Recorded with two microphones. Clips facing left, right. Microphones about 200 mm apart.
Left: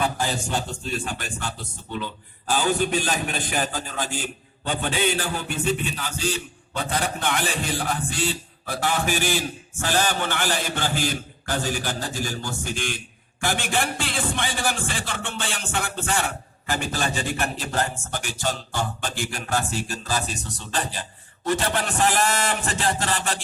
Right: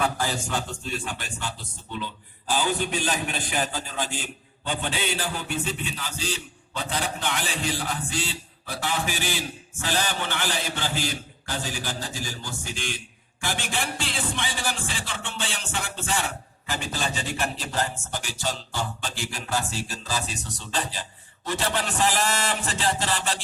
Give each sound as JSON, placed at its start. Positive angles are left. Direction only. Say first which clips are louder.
{"t": 0.9, "sound": "music", "louder": "left 3 dB", "side_deg": 45}